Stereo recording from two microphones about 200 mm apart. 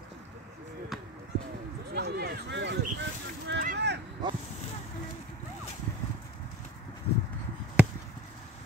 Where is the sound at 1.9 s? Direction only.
55° right (ahead or behind).